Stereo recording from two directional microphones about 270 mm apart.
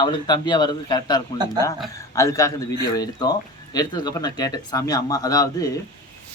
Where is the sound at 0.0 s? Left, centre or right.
Centre.